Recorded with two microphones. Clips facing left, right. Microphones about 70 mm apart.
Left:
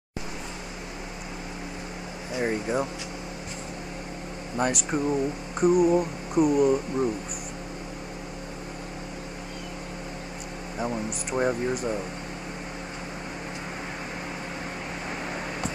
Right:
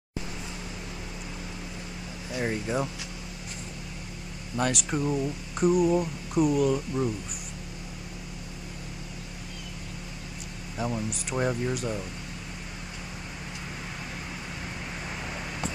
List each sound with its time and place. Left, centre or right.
2.5 s speech: left
4.6 s speech: centre
10.8 s speech: left
11.3 s speech: centre